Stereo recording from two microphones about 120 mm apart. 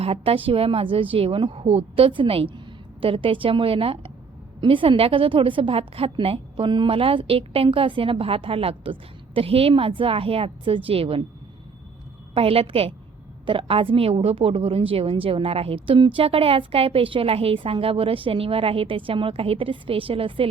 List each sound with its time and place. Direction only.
0.0 s a woman's voice: 55° right (ahead or behind)
12.3 s a woman's voice: 55° right (ahead or behind)